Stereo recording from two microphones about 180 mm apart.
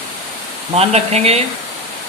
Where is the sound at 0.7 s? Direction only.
35° right (ahead or behind).